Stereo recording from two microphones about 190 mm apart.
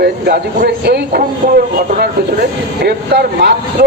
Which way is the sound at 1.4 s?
45° right (ahead or behind).